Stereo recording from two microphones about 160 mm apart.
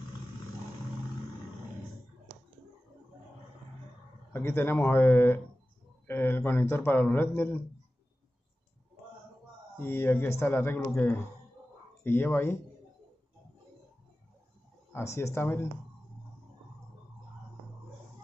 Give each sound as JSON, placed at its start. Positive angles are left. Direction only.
{"t": 4.3, "sound": "a man's voice", "side_deg": 15}
{"t": 9.8, "sound": "a man's voice", "side_deg": 15}
{"t": 14.9, "sound": "a man's voice", "side_deg": 15}